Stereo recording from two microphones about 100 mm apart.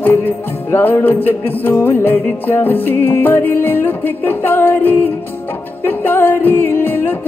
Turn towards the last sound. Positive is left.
turn(degrees=20)  # may be behind; listen again after turning